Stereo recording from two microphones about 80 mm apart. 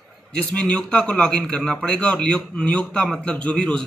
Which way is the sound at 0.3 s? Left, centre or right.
Centre.